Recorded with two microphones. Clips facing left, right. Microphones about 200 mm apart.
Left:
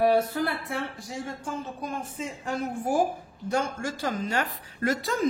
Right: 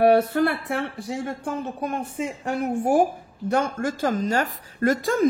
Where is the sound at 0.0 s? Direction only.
65° right (ahead or behind).